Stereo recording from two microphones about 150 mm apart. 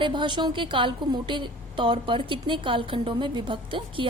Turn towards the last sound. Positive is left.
turn(degrees=-35)  # may be behind; listen again after turning